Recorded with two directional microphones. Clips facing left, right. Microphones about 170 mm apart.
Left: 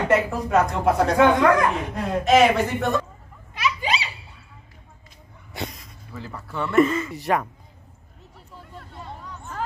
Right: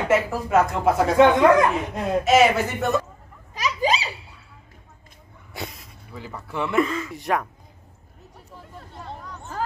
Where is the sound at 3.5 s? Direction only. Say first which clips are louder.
Right 2 dB; 40° right (ahead or behind).